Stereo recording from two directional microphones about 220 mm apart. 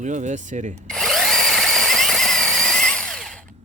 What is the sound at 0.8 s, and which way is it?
Drill, centre (ahead or behind).